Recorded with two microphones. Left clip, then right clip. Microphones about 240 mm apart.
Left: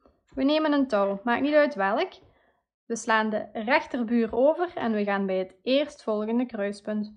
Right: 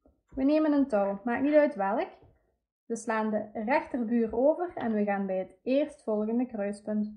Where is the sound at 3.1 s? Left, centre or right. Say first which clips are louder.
Left 6 dB; centre.